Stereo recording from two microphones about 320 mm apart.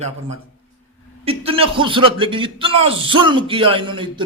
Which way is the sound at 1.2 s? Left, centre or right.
Centre.